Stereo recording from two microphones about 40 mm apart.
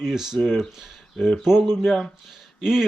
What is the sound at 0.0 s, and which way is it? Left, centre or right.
Speech, centre.